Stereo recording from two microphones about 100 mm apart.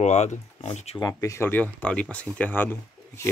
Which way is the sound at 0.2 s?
90° left.